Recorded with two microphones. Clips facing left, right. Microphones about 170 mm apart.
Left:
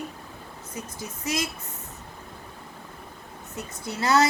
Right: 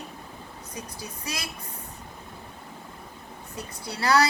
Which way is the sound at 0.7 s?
25° left (ahead or behind).